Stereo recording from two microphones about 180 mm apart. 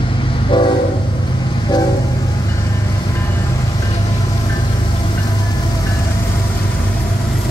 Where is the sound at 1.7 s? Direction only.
20° left (ahead or behind).